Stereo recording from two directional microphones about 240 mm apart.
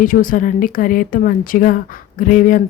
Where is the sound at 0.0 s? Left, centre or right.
Left.